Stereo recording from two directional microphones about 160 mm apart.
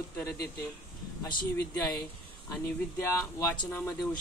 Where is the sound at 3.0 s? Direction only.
15° left (ahead or behind).